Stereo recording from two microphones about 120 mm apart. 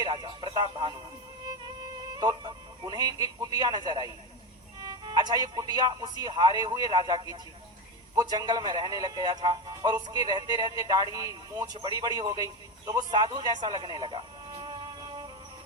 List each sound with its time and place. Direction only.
0.0 s speech: 40° right (ahead or behind)